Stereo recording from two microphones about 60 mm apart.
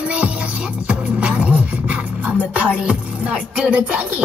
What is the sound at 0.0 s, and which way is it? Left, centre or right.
Music, right.